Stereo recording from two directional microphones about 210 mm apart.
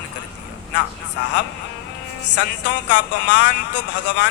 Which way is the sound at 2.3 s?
60° left (ahead or behind).